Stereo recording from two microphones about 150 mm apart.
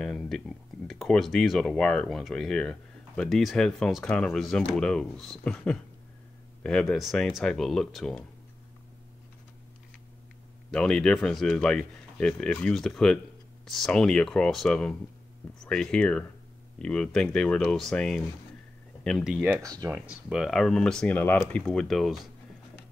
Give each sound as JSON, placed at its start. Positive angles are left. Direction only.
{"t": 0.0, "sound": "speech", "side_deg": 5}
{"t": 10.7, "sound": "speech", "side_deg": 5}
{"t": 19.6, "sound": "speech", "side_deg": -25}
{"t": 19.9, "sound": "speech", "side_deg": -5}